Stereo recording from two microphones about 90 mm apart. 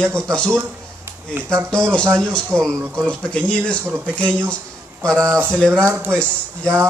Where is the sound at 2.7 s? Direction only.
30° right (ahead or behind).